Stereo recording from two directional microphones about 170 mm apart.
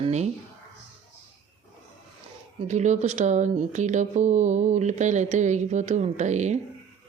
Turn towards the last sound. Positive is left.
turn(degrees=-45)  # may be behind; listen again after turning